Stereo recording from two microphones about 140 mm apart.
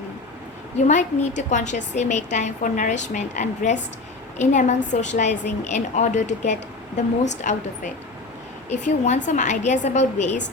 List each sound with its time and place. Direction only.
0.8 s a woman's voice: 60° left (ahead or behind)
8.8 s a woman's voice: 60° left (ahead or behind)